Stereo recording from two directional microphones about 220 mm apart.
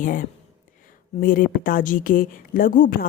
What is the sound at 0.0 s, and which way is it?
Speech, 40° left (ahead or behind).